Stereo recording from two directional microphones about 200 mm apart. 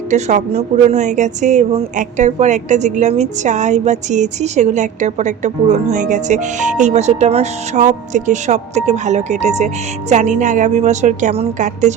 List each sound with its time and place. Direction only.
0.1 s speech: 35° right (ahead or behind)